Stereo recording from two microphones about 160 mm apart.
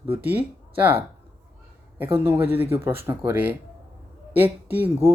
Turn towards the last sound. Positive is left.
turn(degrees=-15)  # may be behind; listen again after turning